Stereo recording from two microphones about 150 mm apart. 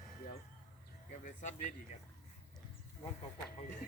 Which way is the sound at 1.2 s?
55° left (ahead or behind).